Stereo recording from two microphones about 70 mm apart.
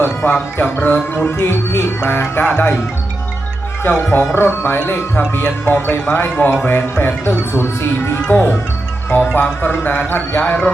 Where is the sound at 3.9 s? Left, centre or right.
Left.